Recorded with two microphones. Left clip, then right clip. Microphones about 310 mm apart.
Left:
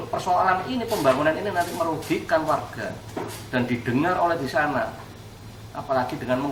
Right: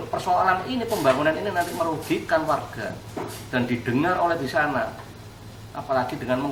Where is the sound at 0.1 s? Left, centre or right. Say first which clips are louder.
Even; centre.